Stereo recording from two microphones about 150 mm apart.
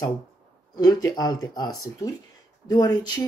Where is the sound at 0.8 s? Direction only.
25° left (ahead or behind).